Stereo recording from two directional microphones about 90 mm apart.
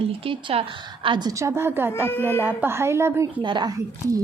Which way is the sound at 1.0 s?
60° right (ahead or behind).